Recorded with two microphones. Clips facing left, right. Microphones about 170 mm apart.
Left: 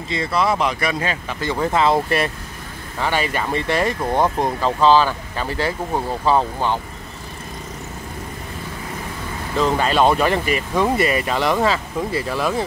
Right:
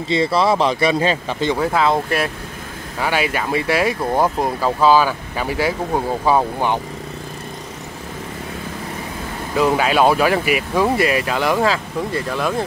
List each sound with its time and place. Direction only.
0.1 s speech: 30° right (ahead or behind)
1.6 s speech: centre (ahead or behind)
9.6 s speech: 10° right (ahead or behind)